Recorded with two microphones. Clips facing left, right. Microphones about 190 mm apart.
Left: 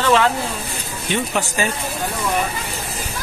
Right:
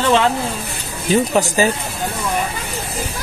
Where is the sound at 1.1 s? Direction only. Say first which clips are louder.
Right 7 dB; 35° right (ahead or behind).